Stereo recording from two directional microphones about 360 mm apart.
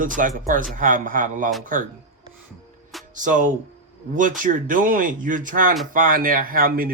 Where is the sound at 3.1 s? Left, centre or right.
Right.